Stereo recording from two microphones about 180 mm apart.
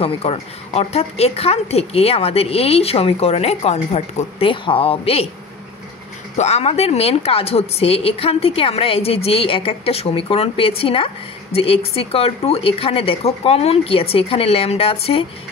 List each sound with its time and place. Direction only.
0.0 s a woman's voice: 35° left (ahead or behind)
6.3 s a woman's voice: 35° left (ahead or behind)